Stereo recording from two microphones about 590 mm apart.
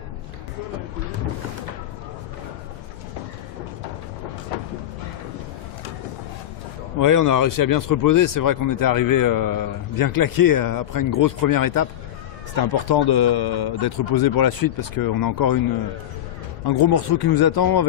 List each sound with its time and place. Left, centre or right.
7.0 s speech: left
16.6 s speech: left